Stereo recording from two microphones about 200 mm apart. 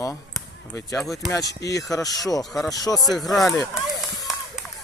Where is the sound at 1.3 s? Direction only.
15° left (ahead or behind).